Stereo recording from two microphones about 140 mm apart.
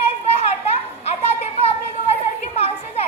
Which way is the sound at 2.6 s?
50° left (ahead or behind).